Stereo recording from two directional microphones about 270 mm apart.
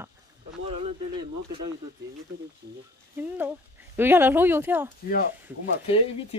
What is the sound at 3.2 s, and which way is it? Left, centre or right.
Speech, centre.